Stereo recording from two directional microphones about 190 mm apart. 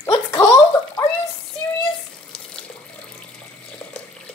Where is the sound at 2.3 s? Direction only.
5° left (ahead or behind).